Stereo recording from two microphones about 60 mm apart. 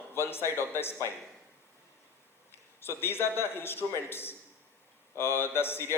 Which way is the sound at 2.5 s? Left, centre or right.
Left.